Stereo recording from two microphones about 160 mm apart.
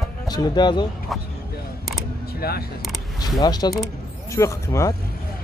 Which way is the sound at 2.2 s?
75° left (ahead or behind).